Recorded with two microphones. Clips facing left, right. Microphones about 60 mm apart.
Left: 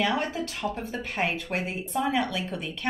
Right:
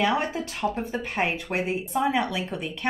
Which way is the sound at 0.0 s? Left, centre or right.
Centre.